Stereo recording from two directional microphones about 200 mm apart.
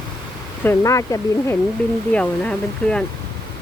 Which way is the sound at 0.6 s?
15° left (ahead or behind).